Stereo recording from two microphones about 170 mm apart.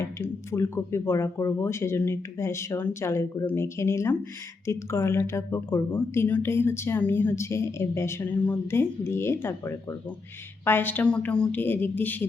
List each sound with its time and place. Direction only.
0.0 s speech: 15° left (ahead or behind)